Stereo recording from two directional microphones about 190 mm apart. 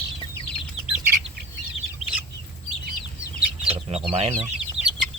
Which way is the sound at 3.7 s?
30° right (ahead or behind).